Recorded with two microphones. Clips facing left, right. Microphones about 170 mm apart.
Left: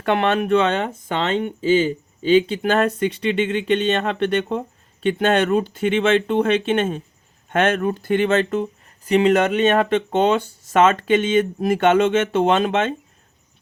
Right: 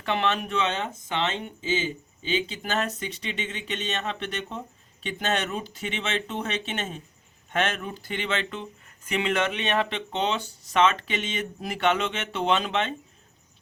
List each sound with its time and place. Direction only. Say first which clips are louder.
0.0 s speech: left 7 dB; 55° left (ahead or behind)